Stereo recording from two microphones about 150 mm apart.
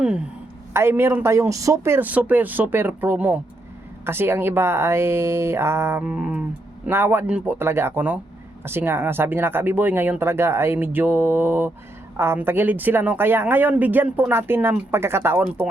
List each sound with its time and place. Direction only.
0.7 s speech: 15° right (ahead or behind)